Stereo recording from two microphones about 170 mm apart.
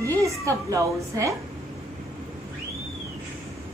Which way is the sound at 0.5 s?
20° right (ahead or behind).